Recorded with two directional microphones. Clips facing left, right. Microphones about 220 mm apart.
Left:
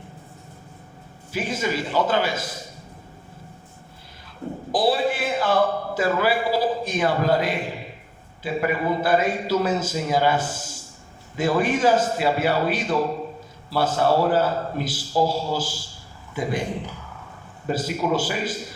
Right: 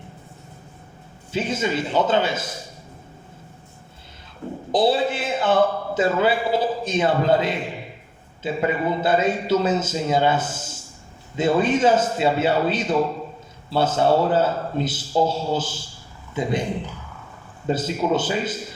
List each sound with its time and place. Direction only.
1.3 s a man's voice: 25° right (ahead or behind)
4.7 s a man's voice: 25° right (ahead or behind)
17.7 s a man's voice: 25° right (ahead or behind)